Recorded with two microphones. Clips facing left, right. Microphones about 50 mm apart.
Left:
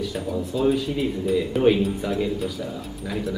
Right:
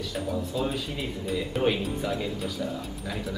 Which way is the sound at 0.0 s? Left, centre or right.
Centre.